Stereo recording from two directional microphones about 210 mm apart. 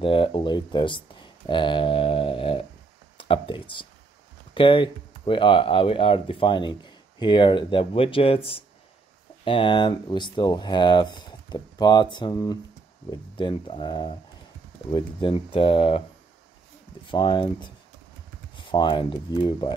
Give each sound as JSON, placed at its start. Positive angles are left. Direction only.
{"t": 0.0, "sound": "speech", "side_deg": 25}
{"t": 17.1, "sound": "speech", "side_deg": 20}